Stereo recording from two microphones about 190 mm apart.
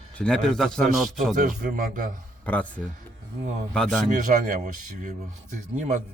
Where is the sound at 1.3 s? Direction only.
45° right (ahead or behind).